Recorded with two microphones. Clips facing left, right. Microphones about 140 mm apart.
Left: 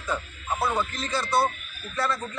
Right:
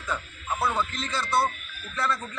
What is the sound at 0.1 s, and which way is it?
A man's voice, 20° left (ahead or behind).